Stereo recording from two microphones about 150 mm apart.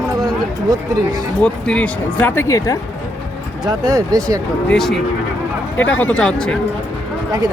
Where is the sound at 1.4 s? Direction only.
5° left (ahead or behind); by 2.7 s 20° left (ahead or behind).